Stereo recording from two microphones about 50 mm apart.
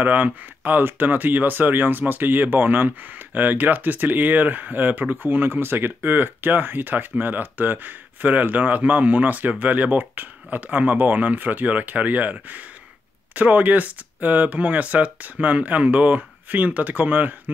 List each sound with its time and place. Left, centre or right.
0.0 s speech: right